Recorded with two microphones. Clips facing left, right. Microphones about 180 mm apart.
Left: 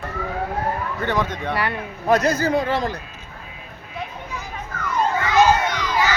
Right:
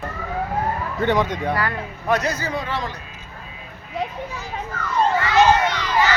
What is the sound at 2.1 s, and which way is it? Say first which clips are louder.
Speech: left 5 dB; 45° left (ahead or behind).